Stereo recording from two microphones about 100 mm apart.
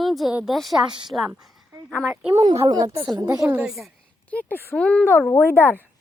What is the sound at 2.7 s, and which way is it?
Speech, 40° right (ahead or behind).